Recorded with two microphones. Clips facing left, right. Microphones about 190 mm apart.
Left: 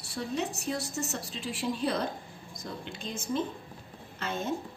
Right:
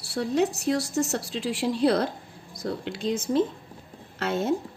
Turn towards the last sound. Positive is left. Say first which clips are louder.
# right 7 dB
turn(degrees=-80)